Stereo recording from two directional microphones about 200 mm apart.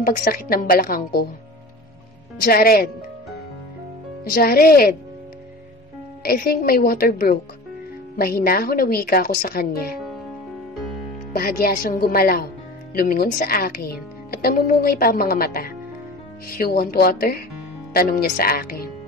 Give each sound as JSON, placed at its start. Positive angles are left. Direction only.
{"t": 0.0, "sound": "a woman's voice", "side_deg": 45}
{"t": 2.4, "sound": "a woman's voice", "side_deg": 50}
{"t": 4.2, "sound": "a woman's voice", "side_deg": 50}
{"t": 6.2, "sound": "a woman's voice", "side_deg": 50}
{"t": 11.3, "sound": "a woman's voice", "side_deg": 50}